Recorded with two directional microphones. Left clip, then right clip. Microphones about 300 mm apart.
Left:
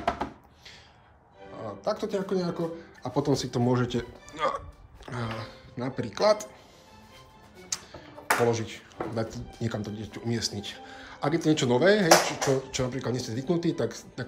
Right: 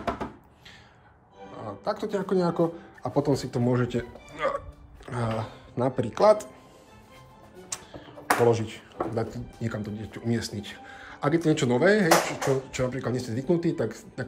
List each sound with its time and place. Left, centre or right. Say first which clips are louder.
1.9 s speech: right 1 dB; centre
7.7 s speech: left 2 dB; centre